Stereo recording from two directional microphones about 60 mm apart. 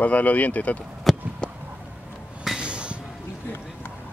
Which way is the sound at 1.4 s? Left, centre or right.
Centre.